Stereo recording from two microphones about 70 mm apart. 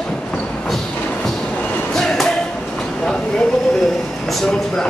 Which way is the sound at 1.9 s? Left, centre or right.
Centre.